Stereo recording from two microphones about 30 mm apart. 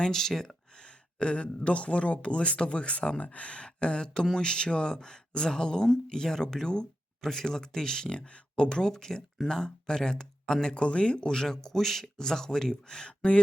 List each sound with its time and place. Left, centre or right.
0.0 s speech: centre
1.2 s speech: left
10.8 s speech: left
11.3 s speech: centre
13.1 s speech: left